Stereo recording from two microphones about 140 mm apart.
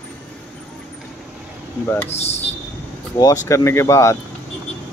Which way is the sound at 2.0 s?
50° left (ahead or behind).